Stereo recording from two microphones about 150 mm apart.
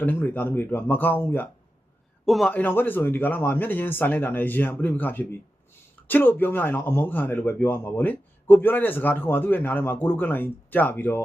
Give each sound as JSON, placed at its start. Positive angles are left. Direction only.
{"t": 0.0, "sound": "speech", "side_deg": 15}
{"t": 2.2, "sound": "a man's voice", "side_deg": 0}
{"t": 2.5, "sound": "speech", "side_deg": 10}